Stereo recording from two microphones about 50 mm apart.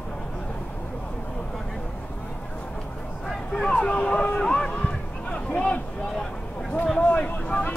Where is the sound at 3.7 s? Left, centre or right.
Centre.